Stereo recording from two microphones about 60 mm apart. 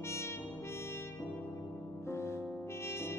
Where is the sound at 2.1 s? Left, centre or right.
Left.